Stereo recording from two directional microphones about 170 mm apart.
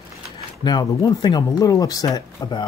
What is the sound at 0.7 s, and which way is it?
Speech, 25° left (ahead or behind).